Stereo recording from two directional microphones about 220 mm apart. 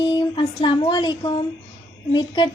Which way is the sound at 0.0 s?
20° left (ahead or behind).